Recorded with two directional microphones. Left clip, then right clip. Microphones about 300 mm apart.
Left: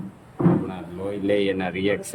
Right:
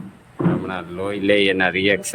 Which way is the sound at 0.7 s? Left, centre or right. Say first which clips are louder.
Right 5 dB; centre.